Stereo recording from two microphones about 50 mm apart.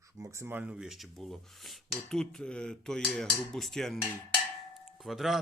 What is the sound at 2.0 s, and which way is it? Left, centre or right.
Cutlery, centre.